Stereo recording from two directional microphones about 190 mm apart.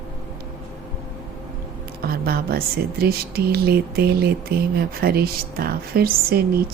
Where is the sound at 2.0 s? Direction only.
55° right (ahead or behind).